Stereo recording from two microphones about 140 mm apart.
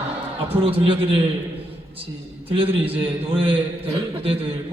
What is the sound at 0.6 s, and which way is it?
Speech, 40° right (ahead or behind).